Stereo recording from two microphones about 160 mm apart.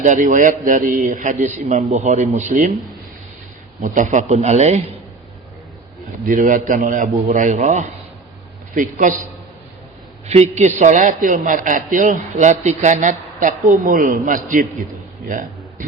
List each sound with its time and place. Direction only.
0.0 s a man's voice: 50° right (ahead or behind)
3.8 s a man's voice: 50° right (ahead or behind)
6.2 s a man's voice: 55° right (ahead or behind)
10.2 s a man's voice: 45° right (ahead or behind)